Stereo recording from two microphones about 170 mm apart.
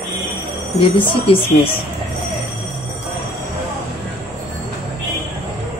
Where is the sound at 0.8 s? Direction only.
30° left (ahead or behind).